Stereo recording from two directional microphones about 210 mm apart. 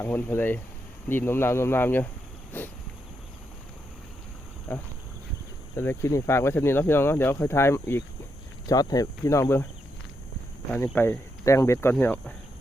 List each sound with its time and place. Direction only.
0.0 s speech: 10° left (ahead or behind)
2.5 s a sound: 10° left (ahead or behind)
4.7 s speech: 10° left (ahead or behind)
10.8 s speech: 10° left (ahead or behind)